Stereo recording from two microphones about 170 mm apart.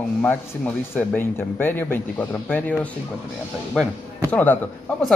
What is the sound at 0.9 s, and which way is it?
Speech, 10° left (ahead or behind).